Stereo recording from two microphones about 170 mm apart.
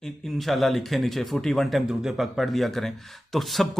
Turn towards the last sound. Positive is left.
turn(degrees=0)  # may be behind; listen again after turning